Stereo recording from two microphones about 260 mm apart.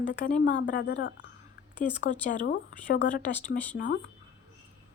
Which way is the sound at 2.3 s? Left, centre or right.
Left.